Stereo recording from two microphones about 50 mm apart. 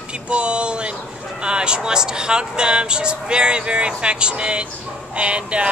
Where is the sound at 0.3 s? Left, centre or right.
Right.